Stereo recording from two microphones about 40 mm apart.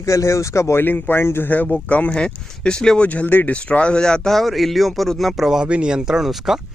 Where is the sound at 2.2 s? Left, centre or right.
Left.